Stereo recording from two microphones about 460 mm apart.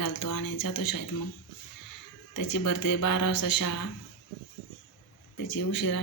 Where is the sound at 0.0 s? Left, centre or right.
Left.